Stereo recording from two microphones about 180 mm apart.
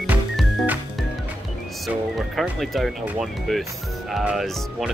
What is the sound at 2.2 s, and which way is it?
Speech, centre (ahead or behind).